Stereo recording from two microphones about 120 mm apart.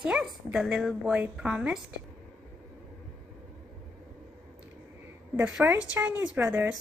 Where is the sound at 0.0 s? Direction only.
5° right (ahead or behind).